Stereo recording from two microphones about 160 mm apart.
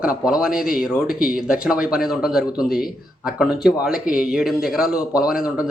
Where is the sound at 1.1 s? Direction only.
65° left (ahead or behind).